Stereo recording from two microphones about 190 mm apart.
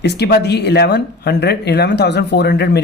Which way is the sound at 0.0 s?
60° left (ahead or behind).